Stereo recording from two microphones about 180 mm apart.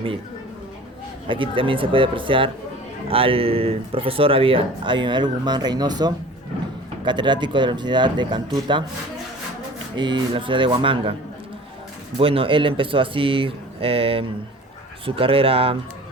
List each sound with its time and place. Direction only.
1.3 s speech: 30° right (ahead or behind)
9.9 s speech: 25° right (ahead or behind)
12.2 s speech: 30° right (ahead or behind)